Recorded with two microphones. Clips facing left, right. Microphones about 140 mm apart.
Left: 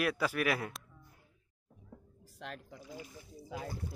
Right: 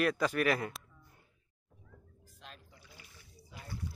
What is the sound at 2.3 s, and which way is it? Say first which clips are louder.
Pour: left 9 dB; 75° left (ahead or behind).